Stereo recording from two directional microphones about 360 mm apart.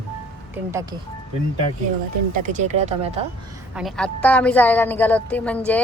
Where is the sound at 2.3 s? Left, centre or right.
Right.